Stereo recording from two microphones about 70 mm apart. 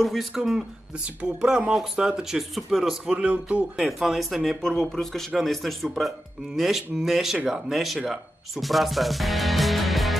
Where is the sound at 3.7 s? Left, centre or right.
Centre.